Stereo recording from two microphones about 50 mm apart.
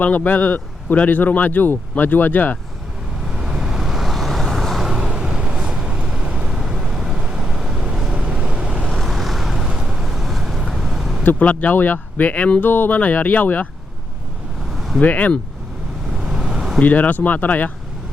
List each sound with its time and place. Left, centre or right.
0.0 s speech: left
3.2 s vehicle: centre
4.9 s vehicle: centre
8.9 s vehicle: centre
11.2 s speech: left
14.8 s vehicle: centre
15.0 s speech: left
16.1 s vehicle: centre
16.8 s speech: left